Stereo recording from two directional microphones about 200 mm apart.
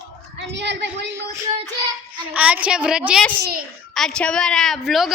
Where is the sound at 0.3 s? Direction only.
60° right (ahead or behind).